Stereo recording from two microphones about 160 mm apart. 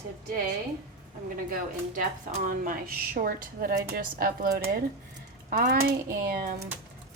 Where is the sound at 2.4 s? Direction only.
60° right (ahead or behind).